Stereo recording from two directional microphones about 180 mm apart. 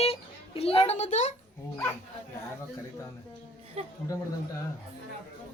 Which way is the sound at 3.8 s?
35° right (ahead or behind).